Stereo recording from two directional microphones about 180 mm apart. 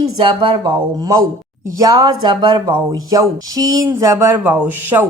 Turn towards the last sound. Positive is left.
turn(degrees=-10)  # may be behind; listen again after turning